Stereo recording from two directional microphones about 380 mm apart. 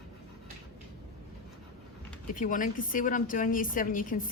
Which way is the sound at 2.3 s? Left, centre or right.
Left.